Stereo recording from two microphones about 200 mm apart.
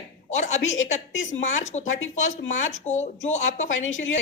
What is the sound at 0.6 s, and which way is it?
Speech, 75° left (ahead or behind).